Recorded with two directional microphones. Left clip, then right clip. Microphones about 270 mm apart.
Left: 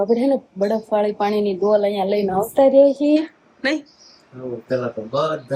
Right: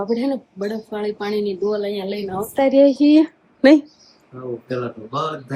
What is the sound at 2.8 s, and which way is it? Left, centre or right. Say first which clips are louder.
Speech: right 1 dB; centre.